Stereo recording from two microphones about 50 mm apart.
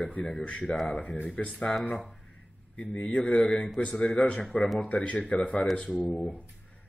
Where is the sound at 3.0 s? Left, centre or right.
Left.